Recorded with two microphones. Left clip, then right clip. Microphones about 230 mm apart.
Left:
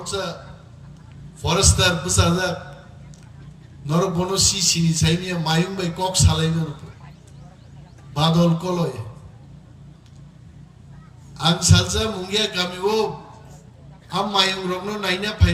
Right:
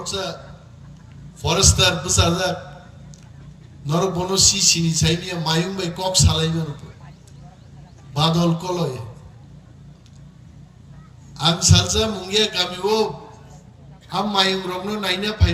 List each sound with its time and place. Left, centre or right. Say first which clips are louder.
0.0 s a man's voice: even; right
1.4 s a man's voice: right 2 dB; right
3.8 s a man's voice: even; right
8.1 s a man's voice: even; right
11.3 s a man's voice: right 1 dB; right
14.1 s a man's voice: even; right